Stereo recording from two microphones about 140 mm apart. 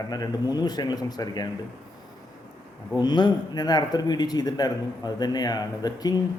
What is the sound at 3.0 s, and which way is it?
A man's voice, 30° left (ahead or behind).